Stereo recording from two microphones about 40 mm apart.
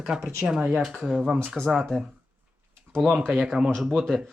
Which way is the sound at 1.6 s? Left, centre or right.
Right.